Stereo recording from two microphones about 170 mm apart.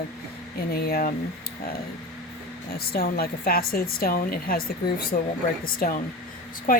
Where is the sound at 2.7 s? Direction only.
65° left (ahead or behind).